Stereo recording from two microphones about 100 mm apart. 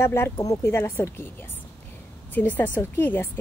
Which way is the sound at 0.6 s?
25° left (ahead or behind).